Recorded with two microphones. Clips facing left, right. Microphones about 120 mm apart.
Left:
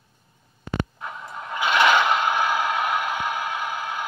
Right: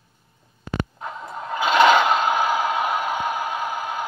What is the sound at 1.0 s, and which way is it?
Scrape, 25° right (ahead or behind).